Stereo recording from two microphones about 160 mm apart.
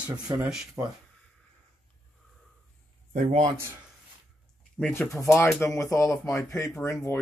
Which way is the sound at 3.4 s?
15° right (ahead or behind).